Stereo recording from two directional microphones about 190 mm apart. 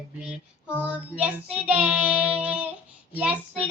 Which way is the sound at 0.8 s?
5° right (ahead or behind).